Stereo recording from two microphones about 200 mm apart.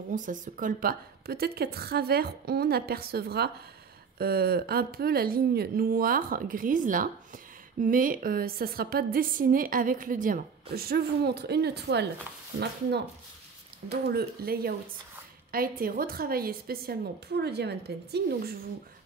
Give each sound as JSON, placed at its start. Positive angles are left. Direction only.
{"t": 0.1, "sound": "a woman's voice", "side_deg": -40}
{"t": 13.8, "sound": "a woman's voice", "side_deg": -55}